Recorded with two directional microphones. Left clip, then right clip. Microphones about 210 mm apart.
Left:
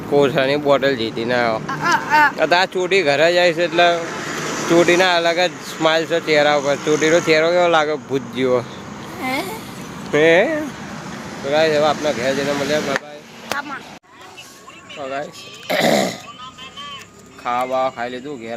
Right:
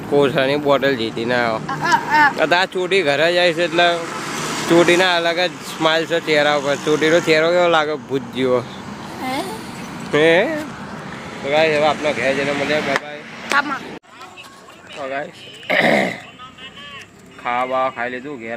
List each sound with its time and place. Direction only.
0.1 s speech: centre (ahead or behind)
4.0 s vehicle: 55° right (ahead or behind)
4.7 s speech: 5° right (ahead or behind)
9.2 s a sound: centre (ahead or behind)
10.1 s speech: centre (ahead or behind)
11.4 s speech: 10° left (ahead or behind)
15.1 s speech: 10° left (ahead or behind)
17.4 s speech: 5° left (ahead or behind)